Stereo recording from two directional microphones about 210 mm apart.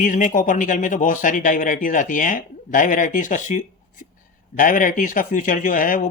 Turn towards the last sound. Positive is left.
turn(degrees=40)  # may be behind; listen again after turning